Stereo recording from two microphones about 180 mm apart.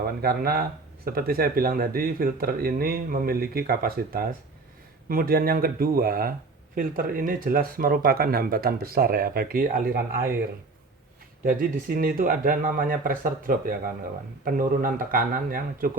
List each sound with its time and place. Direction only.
0.2 s speech: 55° right (ahead or behind)
11.4 s speech: 50° right (ahead or behind)